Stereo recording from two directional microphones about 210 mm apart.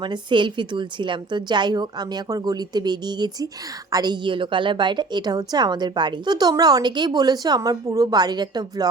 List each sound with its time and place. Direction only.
0.0 s a woman's voice: 20° right (ahead or behind)